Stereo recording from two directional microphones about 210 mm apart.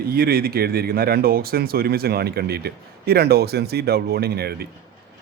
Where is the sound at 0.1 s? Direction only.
45° right (ahead or behind).